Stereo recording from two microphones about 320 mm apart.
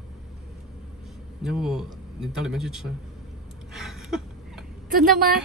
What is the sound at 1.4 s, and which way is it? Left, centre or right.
A man's voice, centre.